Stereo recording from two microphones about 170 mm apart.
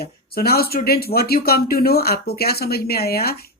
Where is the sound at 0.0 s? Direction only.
65° left (ahead or behind).